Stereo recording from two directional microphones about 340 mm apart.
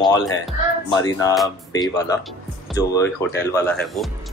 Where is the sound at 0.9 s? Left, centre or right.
Centre.